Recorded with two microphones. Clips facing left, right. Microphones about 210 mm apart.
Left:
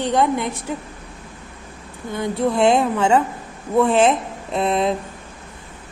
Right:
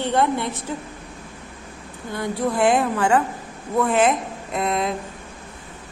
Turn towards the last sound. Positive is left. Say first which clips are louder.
# left 4 dB
turn(degrees=25)  # may be behind; listen again after turning